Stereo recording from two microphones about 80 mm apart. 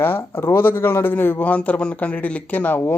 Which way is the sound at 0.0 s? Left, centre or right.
Left.